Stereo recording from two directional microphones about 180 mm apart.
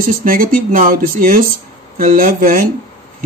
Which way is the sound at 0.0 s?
50° right (ahead or behind).